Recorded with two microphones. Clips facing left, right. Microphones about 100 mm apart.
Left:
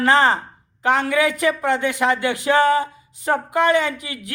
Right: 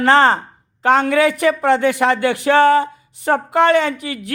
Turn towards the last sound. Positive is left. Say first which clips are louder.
# right 3 dB
turn(degrees=-30)  # may be behind; listen again after turning